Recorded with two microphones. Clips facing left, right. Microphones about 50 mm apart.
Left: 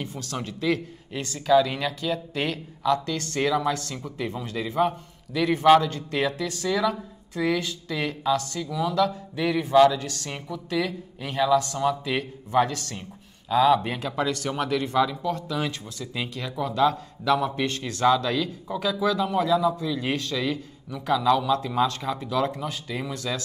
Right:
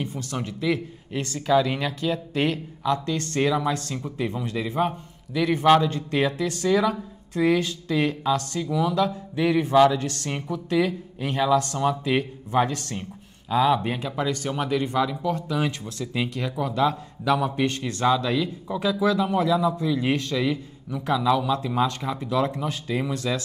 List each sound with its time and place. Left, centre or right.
0.0 s a man's voice: right
3.3 s speech: centre
4.0 s speech: right
4.6 s speech: centre
8.5 s speech: centre
9.9 s speech: right
11.5 s speech: right
11.9 s speech: right
13.5 s speech: centre
15.2 s speech: right
18.0 s speech: centre
21.1 s speech: centre
21.4 s speech: right
23.3 s speech: centre